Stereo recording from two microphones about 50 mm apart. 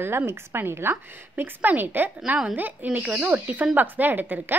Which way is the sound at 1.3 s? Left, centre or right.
Right.